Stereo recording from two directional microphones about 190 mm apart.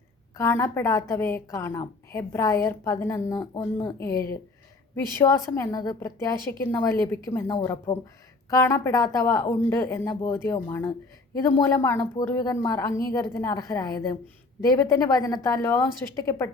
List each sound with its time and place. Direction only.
0.3 s a woman's voice: 15° left (ahead or behind)